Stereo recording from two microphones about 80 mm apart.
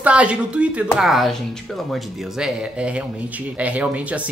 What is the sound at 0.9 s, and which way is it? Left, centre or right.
Speech, centre.